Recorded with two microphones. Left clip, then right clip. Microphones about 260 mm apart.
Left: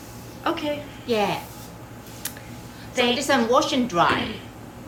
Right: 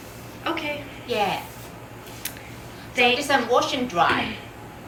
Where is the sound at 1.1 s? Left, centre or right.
Left.